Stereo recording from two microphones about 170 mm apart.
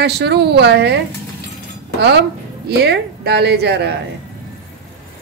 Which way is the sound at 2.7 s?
75° right (ahead or behind).